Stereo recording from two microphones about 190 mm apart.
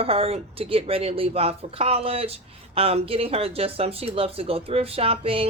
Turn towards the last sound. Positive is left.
turn(degrees=-30)  # may be behind; listen again after turning